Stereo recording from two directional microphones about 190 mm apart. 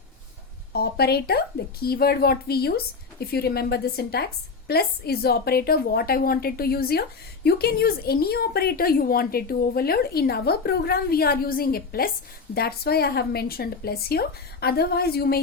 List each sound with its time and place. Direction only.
0.7 s a woman's voice: 55° left (ahead or behind)